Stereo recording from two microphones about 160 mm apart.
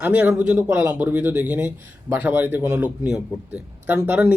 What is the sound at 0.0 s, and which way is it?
A man's voice, 15° right (ahead or behind).